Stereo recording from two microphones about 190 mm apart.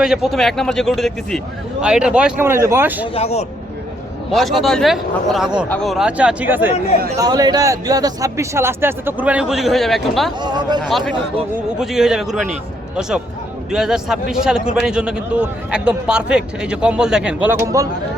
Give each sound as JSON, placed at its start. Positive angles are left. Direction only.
{"t": 0.0, "sound": "a man's voice", "side_deg": 0}
{"t": 3.2, "sound": "a man's voice", "side_deg": 35}
{"t": 4.3, "sound": "a man's voice", "side_deg": 0}
{"t": 10.4, "sound": "speech", "side_deg": -20}
{"t": 10.8, "sound": "a man's voice", "side_deg": 5}